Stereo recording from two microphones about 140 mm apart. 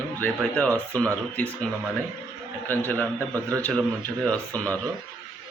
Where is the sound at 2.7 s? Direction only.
10° left (ahead or behind).